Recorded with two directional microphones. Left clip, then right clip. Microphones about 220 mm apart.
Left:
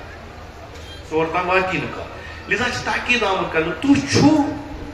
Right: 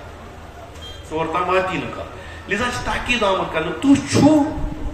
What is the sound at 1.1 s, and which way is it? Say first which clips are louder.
A man's voice: left 1 dB; 55° right (ahead or behind).